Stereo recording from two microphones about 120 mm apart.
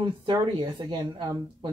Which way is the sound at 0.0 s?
40° right (ahead or behind).